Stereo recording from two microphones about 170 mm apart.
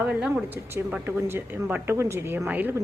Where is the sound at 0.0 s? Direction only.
10° right (ahead or behind).